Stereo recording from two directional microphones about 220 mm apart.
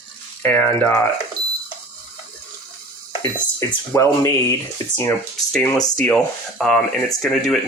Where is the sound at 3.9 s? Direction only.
15° left (ahead or behind).